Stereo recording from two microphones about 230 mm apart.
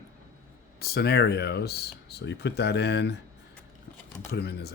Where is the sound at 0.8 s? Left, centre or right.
Left.